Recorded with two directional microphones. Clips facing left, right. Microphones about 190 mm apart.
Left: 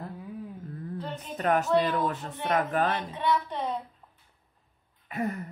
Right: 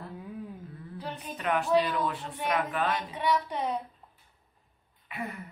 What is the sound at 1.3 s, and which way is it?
Speech, 45° left (ahead or behind).